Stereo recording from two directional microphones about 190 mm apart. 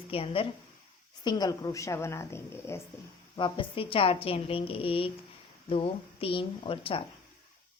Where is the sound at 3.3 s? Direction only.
25° left (ahead or behind).